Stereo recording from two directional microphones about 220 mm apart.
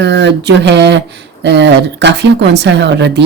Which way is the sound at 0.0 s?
50° right (ahead or behind).